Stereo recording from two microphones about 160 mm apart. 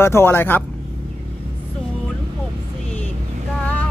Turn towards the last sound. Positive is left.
turn(degrees=10)  # may be behind; listen again after turning